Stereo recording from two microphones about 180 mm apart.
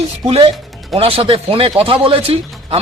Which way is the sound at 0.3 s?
35° right (ahead or behind).